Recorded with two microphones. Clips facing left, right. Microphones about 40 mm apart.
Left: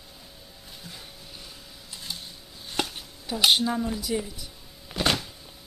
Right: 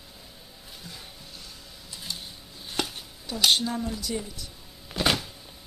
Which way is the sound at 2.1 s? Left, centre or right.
Centre.